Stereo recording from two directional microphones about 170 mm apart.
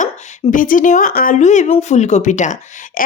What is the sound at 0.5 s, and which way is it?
Speech, 50° left (ahead or behind).